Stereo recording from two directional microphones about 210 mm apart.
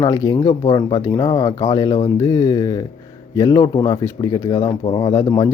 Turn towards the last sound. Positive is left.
turn(degrees=15)  # may be behind; listen again after turning